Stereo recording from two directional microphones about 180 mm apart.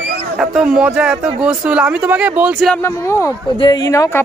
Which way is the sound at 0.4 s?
5° right (ahead or behind).